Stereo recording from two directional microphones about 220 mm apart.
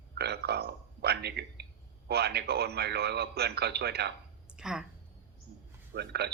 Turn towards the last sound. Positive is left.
turn(degrees=-50)  # may be behind; listen again after turning